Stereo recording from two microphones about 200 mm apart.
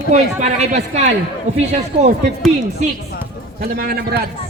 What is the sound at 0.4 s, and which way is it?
A man's voice, 35° right (ahead or behind).